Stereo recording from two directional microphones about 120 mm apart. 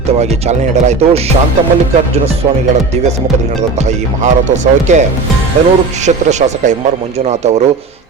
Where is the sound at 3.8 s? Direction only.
70° right (ahead or behind).